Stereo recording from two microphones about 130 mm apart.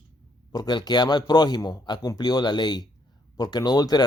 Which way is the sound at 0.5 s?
35° left (ahead or behind).